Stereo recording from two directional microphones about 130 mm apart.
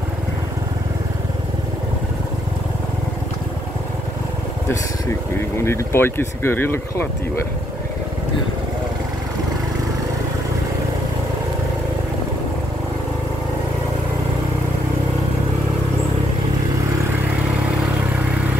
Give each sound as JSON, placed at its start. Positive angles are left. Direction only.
{"t": 5.6, "sound": "speech", "side_deg": 20}